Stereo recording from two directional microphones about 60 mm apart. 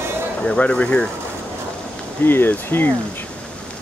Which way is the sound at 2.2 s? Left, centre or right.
Left.